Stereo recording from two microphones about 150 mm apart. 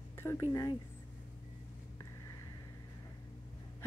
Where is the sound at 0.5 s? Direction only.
25° left (ahead or behind).